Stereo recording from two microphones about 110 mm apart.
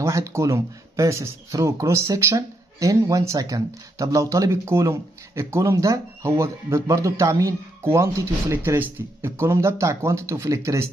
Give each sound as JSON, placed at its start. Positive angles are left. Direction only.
{"t": 0.0, "sound": "speech", "side_deg": -25}